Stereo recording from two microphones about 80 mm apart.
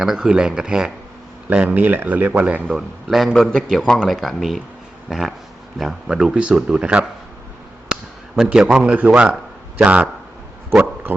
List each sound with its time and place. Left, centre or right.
0.0 s speech: centre
1.5 s speech: centre
2.7 s a man's voice: centre
5.0 s a sound: centre
5.8 s speech: centre
8.4 s speech: centre
9.3 s a sound: centre